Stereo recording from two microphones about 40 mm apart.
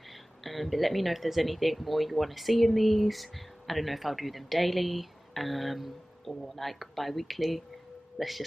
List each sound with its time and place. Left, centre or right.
0.4 s speech: centre